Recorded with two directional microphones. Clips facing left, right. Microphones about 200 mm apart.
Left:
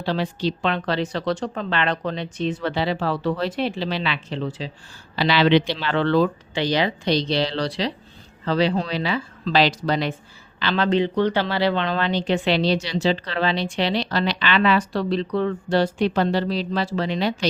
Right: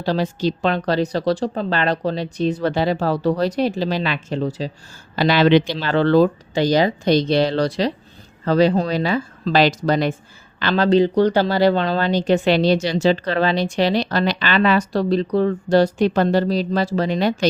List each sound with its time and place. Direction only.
0.0 s speech: 40° right (ahead or behind)